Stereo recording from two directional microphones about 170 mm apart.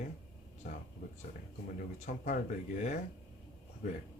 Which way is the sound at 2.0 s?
50° left (ahead or behind).